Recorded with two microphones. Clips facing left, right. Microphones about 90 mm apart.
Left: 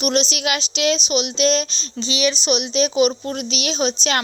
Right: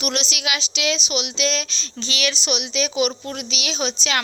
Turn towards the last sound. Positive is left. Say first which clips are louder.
# left 4 dB
turn(degrees=40)  # may be behind; listen again after turning